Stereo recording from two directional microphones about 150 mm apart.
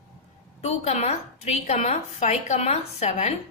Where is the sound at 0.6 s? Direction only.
45° left (ahead or behind).